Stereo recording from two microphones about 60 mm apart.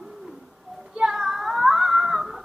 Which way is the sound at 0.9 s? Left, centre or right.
Centre.